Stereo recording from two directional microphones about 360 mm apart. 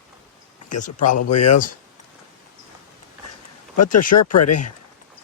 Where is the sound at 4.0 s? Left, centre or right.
Left.